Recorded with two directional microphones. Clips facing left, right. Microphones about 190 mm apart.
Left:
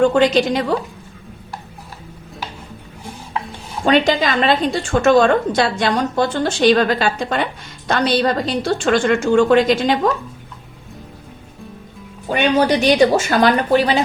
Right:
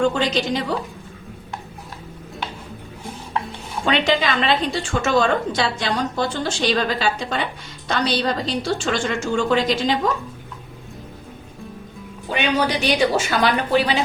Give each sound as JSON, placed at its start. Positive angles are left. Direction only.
{"t": 0.0, "sound": "a woman's voice", "side_deg": 55}
{"t": 3.8, "sound": "a woman's voice", "side_deg": 45}
{"t": 12.3, "sound": "a woman's voice", "side_deg": 45}